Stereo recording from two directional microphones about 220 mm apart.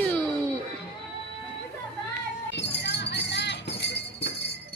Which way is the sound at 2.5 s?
50° left (ahead or behind).